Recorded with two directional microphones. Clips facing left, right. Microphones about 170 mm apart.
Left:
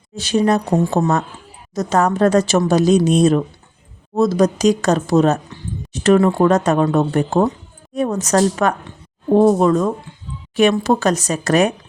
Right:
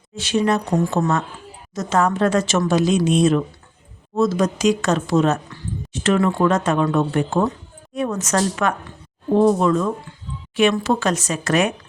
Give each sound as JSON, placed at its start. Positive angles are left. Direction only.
{"t": 0.2, "sound": "speech", "side_deg": 40}